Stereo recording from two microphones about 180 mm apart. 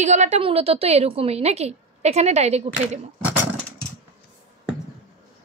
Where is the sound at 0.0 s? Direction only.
40° right (ahead or behind).